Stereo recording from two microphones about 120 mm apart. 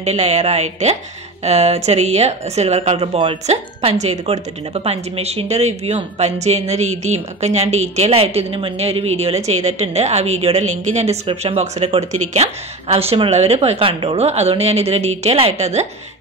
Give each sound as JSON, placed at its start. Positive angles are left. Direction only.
{"t": 0.0, "sound": "speech", "side_deg": -70}
{"t": 11.2, "sound": "speech", "side_deg": -60}